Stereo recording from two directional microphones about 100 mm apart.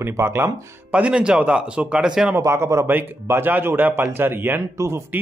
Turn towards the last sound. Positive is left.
turn(degrees=-30)  # may be behind; listen again after turning